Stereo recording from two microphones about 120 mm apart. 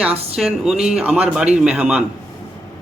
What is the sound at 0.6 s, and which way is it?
Speech, 5° right (ahead or behind).